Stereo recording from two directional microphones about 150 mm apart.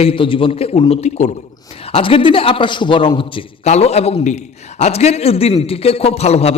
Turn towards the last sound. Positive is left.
turn(degrees=45)  # may be behind; listen again after turning